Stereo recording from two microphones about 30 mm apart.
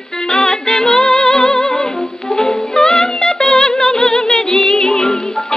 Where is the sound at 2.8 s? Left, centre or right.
Left.